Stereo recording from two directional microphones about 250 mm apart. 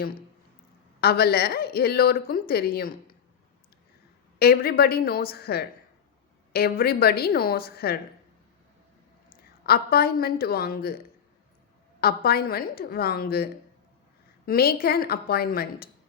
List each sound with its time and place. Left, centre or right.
1.0 s a woman's voice: left
4.4 s a woman's voice: left
9.3 s a woman's voice: left
11.9 s a woman's voice: left